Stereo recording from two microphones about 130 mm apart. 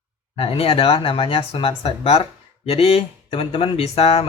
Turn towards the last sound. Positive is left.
turn(degrees=50)  # may be behind; listen again after turning